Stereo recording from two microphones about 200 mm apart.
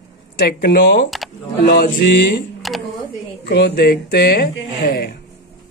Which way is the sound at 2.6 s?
Centre (ahead or behind).